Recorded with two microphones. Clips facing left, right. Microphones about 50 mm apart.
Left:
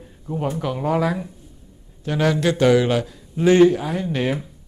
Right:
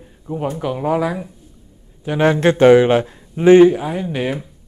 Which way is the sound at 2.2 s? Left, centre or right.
Right.